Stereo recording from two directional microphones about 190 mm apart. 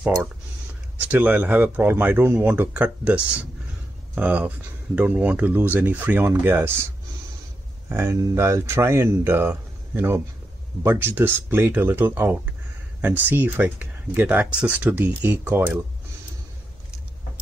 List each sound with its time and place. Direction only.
0.9 s speech: 10° right (ahead or behind)
7.9 s speech: 15° right (ahead or behind)